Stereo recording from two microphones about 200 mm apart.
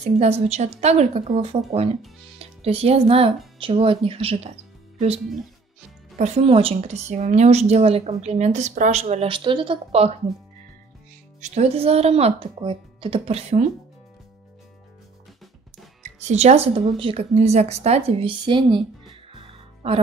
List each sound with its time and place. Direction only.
0.2 s a woman's voice: 30° right (ahead or behind)
6.1 s a woman's voice: 35° right (ahead or behind)
11.4 s a woman's voice: 35° right (ahead or behind)
16.3 s a woman's voice: 35° right (ahead or behind)